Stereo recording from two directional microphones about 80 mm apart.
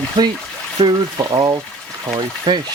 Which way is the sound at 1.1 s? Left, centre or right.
Right.